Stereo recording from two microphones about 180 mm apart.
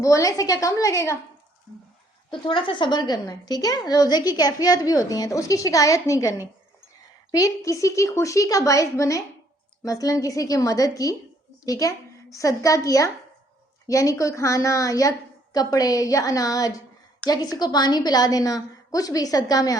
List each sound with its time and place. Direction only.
0.0 s a woman's voice: 15° left (ahead or behind)
2.4 s a woman's voice: 25° left (ahead or behind)